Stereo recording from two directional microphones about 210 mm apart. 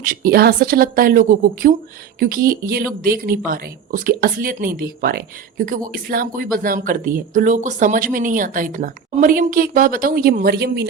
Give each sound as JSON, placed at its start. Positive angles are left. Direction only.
{"t": 0.0, "sound": "speech", "side_deg": -45}